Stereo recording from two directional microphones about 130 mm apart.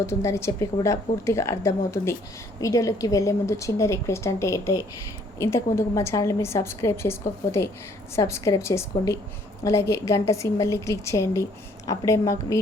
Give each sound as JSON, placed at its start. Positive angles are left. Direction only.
{"t": 0.0, "sound": "a woman's voice", "side_deg": 20}